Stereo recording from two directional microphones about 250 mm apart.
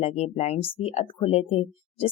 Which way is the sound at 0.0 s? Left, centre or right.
Left.